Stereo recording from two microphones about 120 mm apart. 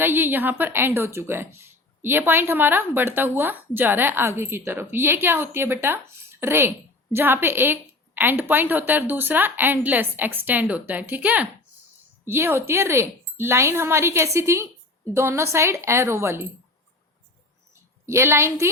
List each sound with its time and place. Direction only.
0.0 s a woman's voice: 15° right (ahead or behind)
18.0 s speech: 20° right (ahead or behind)